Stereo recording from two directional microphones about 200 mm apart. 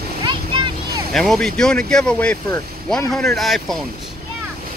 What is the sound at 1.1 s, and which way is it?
Speech, centre (ahead or behind).